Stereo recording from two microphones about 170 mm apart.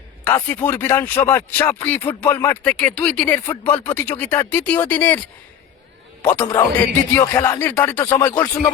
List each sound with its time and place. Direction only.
0.3 s speech: 10° left (ahead or behind)
6.2 s speech: 10° left (ahead or behind)